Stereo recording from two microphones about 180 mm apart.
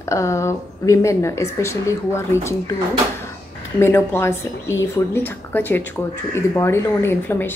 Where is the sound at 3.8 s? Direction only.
15° left (ahead or behind).